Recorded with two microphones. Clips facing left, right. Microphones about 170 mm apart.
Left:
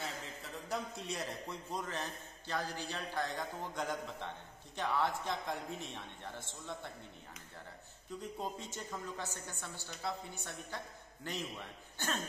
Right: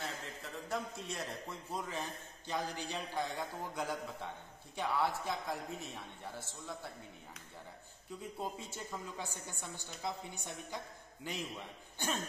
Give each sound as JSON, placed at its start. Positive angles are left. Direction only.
{"t": 0.0, "sound": "a man's voice", "side_deg": 0}
{"t": 8.2, "sound": "a man's voice", "side_deg": -10}